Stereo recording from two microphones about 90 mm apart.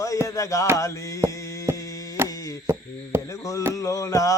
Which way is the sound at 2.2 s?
40° left (ahead or behind).